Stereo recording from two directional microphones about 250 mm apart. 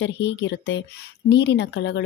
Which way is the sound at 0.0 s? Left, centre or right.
Left.